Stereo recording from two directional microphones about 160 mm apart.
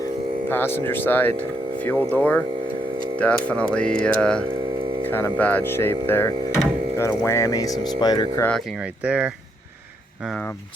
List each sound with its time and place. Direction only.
0.4 s speech: 15° left (ahead or behind)
8.8 s speech: 10° right (ahead or behind)
10.2 s speech: 5° left (ahead or behind)